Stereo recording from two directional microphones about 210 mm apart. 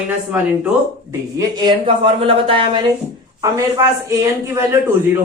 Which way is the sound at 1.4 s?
20° right (ahead or behind).